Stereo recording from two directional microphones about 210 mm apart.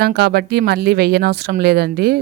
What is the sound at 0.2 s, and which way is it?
Speech, 50° right (ahead or behind).